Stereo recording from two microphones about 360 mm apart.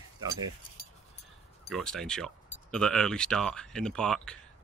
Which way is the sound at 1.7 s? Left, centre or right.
Centre.